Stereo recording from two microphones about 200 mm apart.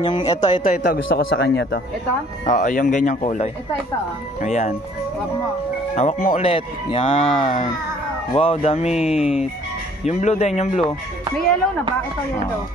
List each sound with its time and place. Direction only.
0.0 s speech: 20° left (ahead or behind)
0.4 s speech: 40° left (ahead or behind)
0.9 s speech: 70° left (ahead or behind)
2.4 s speech: 40° left (ahead or behind)
5.9 s speech: 35° left (ahead or behind)
9.0 s speech: 5° right (ahead or behind)
10.0 s speech: 35° left (ahead or behind)